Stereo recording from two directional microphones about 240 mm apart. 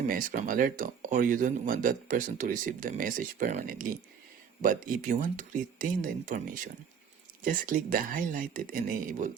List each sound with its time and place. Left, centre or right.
0.1 s speech: right